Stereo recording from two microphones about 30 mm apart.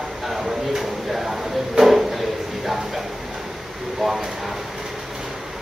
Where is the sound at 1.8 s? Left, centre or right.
Right.